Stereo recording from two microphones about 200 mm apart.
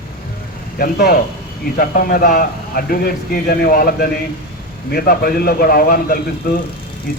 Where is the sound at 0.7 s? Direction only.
50° left (ahead or behind).